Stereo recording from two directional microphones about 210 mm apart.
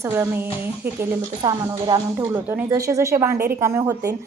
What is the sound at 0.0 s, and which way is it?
Speech, 10° right (ahead or behind).